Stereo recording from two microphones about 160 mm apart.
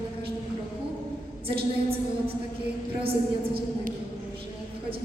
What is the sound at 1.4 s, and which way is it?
A woman's voice, 35° right (ahead or behind).